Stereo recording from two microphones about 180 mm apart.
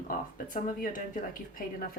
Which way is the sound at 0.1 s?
45° left (ahead or behind).